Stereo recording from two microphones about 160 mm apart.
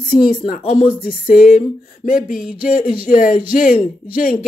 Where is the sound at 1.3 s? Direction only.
60° left (ahead or behind).